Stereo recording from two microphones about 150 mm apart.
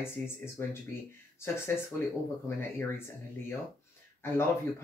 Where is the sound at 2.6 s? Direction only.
15° left (ahead or behind).